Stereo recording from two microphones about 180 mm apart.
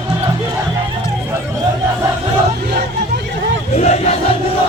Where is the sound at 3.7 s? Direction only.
35° left (ahead or behind).